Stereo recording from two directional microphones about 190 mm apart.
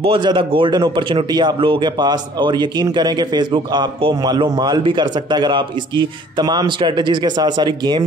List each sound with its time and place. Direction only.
0.0 s speech: 25° right (ahead or behind)